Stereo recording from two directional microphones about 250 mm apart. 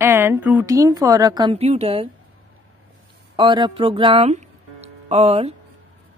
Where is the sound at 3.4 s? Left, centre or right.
Centre.